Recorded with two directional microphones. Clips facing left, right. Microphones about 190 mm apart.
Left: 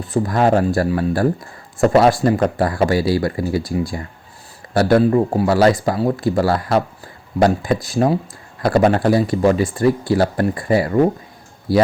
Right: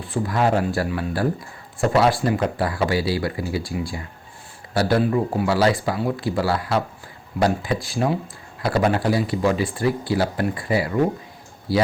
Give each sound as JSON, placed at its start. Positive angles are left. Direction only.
{"t": 0.0, "sound": "speech", "side_deg": 45}
{"t": 8.6, "sound": "speech", "side_deg": 50}